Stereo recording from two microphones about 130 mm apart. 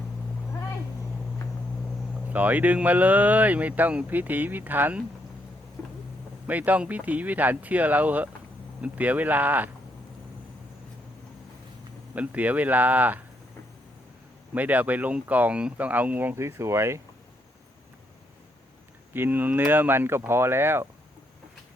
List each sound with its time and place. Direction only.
2.3 s speech: 10° right (ahead or behind)
6.5 s speech: 10° right (ahead or behind)
12.1 s speech: 10° right (ahead or behind)
14.5 s speech: 10° right (ahead or behind)
19.1 s speech: 15° right (ahead or behind)